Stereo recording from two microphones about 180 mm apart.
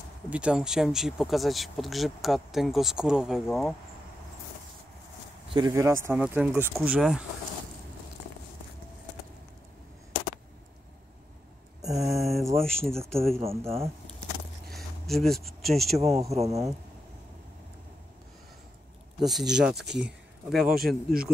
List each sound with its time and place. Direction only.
0.3 s speech: 5° right (ahead or behind)
5.5 s speech: 20° right (ahead or behind)
6.0 s speech: 10° right (ahead or behind)
11.8 s a sound: 20° right (ahead or behind)
12.2 s mantra: centre (ahead or behind)
12.5 s speech: 5° left (ahead or behind)
13.4 s speech: 35° right (ahead or behind)
14.7 s a sound: centre (ahead or behind)
16.0 s speech: 35° right (ahead or behind)
19.1 s speech: centre (ahead or behind)